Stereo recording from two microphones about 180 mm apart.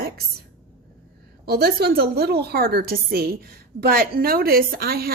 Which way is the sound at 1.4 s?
60° right (ahead or behind).